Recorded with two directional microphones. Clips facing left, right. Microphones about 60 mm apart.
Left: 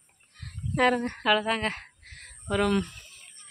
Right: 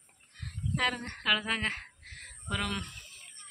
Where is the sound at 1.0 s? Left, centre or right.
Centre.